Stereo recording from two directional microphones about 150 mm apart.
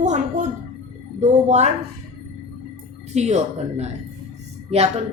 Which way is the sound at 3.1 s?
50° right (ahead or behind).